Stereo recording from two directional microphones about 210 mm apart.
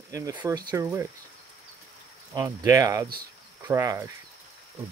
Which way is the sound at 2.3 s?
15° right (ahead or behind).